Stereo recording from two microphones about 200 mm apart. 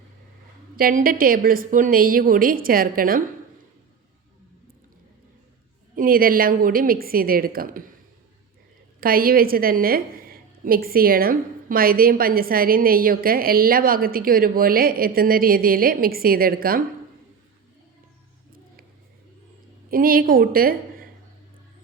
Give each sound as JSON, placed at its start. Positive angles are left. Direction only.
{"t": 0.8, "sound": "a woman's voice", "side_deg": -45}
{"t": 6.0, "sound": "a woman's voice", "side_deg": -45}
{"t": 9.0, "sound": "a woman's voice", "side_deg": -45}
{"t": 19.9, "sound": "a woman's voice", "side_deg": -45}